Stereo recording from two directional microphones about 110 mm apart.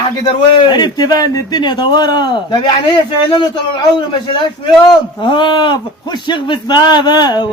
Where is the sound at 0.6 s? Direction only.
40° left (ahead or behind).